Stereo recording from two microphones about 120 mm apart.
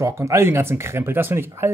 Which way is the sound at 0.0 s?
25° right (ahead or behind).